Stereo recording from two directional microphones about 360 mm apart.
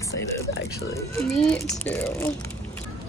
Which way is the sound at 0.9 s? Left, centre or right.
Centre.